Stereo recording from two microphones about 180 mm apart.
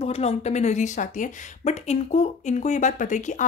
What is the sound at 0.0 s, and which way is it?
Speech, 35° left (ahead or behind).